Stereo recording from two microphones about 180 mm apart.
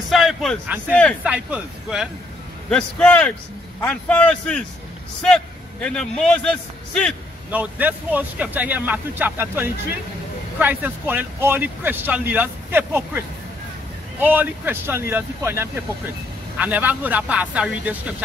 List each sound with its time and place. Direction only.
0.1 s speech: centre (ahead or behind)
1.2 s speech: 5° right (ahead or behind)
2.7 s a man's voice: 5° left (ahead or behind)
7.5 s speech: 10° right (ahead or behind)
14.2 s speech: 10° right (ahead or behind)